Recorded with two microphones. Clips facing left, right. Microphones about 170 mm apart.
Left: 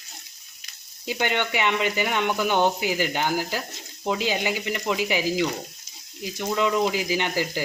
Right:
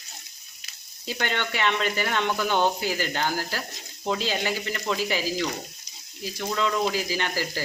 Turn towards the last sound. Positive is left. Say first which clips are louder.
# left 3 dB
turn(degrees=15)  # may be behind; listen again after turning